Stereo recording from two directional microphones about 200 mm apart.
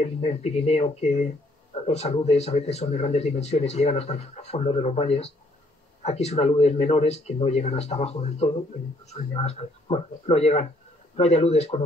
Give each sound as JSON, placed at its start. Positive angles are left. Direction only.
{"t": 0.0, "sound": "speech", "side_deg": 30}